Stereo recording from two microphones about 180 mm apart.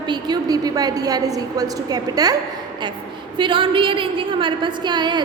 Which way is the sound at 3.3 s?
25° right (ahead or behind).